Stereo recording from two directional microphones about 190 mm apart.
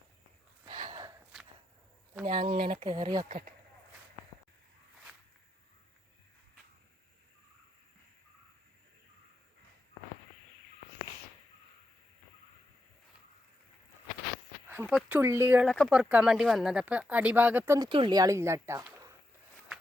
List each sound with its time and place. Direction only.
0.6 s gasp: 25° right (ahead or behind)
2.2 s speech: 25° right (ahead or behind)
3.2 s speech: 40° right (ahead or behind)
14.7 s a sound: 10° right (ahead or behind)
14.9 s speech: 10° right (ahead or behind)
15.6 s speech: 5° left (ahead or behind)
17.7 s speech: 25° right (ahead or behind)